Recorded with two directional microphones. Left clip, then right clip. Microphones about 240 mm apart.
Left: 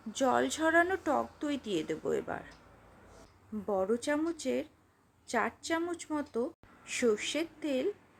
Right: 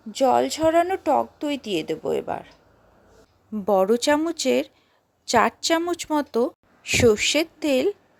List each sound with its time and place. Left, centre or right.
0.1 s a woman's voice: right
3.7 s speech: right